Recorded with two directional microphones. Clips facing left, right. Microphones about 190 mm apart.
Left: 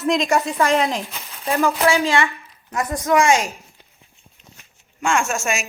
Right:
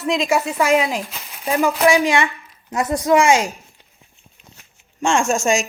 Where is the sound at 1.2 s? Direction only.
15° right (ahead or behind).